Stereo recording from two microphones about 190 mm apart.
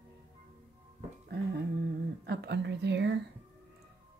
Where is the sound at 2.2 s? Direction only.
60° right (ahead or behind).